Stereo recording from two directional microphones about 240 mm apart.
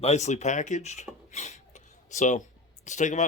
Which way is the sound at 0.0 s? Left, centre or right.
Left.